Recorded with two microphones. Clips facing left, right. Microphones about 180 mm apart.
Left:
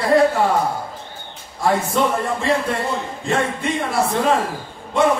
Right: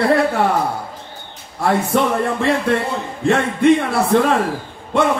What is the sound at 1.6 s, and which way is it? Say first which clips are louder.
A man's voice: right 2 dB; 60° right (ahead or behind).